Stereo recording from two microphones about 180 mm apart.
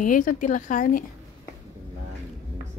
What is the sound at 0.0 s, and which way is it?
A woman's voice, 50° left (ahead or behind).